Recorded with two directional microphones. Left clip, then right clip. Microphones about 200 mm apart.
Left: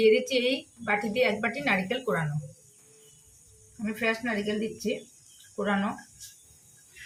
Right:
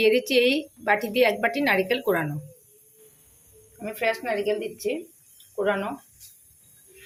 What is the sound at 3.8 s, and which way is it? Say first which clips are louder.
Speech: right 3 dB; 35° right (ahead or behind).